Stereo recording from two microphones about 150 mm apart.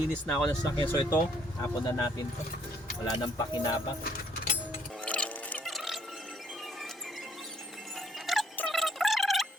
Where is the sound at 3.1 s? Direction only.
30° left (ahead or behind).